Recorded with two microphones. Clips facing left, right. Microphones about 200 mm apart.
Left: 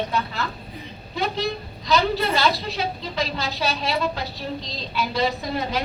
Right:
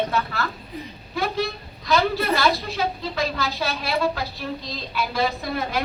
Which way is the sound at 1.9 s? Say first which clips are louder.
Even; 20° left (ahead or behind).